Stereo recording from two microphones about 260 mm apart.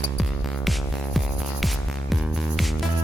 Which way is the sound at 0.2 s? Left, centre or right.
Centre.